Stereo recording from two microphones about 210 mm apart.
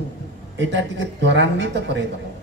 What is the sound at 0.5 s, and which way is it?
A woman's voice, 55° right (ahead or behind).